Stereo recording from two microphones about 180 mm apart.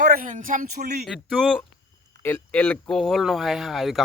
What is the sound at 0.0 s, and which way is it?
Speech, 50° right (ahead or behind).